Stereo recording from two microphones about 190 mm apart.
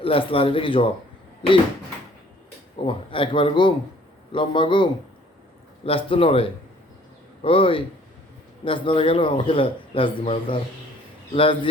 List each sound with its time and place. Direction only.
0.0 s a man's voice: 30° left (ahead or behind)
2.7 s a man's voice: 25° left (ahead or behind)